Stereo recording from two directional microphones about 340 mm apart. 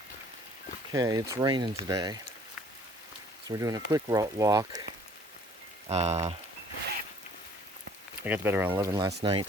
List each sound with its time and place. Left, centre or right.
0.9 s speech: centre
3.4 s speech: centre
5.9 s rain on surface: centre
8.2 s speech: centre